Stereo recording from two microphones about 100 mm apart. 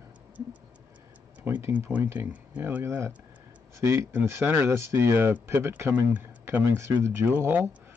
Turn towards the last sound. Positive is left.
turn(degrees=-20)  # may be behind; listen again after turning